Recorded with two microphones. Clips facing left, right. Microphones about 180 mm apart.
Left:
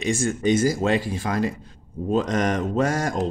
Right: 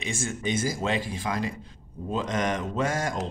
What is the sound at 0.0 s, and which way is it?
Speech, 45° left (ahead or behind).